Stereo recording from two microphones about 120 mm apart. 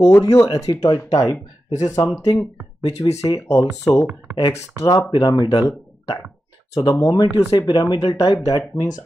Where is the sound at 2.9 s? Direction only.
65° left (ahead or behind).